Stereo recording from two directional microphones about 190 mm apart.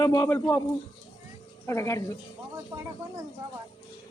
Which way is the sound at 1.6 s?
15° left (ahead or behind).